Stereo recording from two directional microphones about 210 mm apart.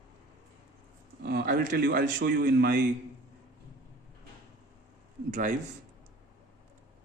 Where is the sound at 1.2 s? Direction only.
45° right (ahead or behind).